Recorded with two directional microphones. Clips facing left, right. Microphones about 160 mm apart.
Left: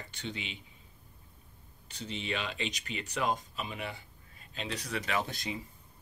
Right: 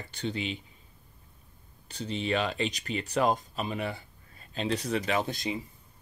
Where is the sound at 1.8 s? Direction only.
35° right (ahead or behind).